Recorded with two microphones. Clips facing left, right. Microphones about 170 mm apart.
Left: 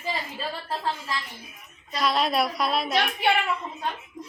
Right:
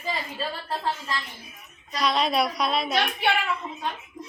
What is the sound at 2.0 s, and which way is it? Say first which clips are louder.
A woman's voice: even; centre (ahead or behind).